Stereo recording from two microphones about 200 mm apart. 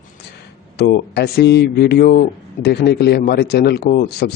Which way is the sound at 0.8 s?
50° left (ahead or behind).